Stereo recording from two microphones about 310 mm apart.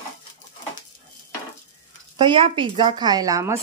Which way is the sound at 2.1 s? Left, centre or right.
Centre.